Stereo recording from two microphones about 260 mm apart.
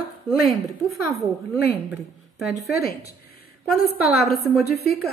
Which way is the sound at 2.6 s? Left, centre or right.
Centre.